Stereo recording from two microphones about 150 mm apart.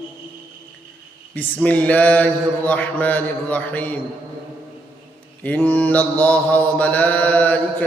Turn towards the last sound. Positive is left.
turn(degrees=10)  # may be behind; listen again after turning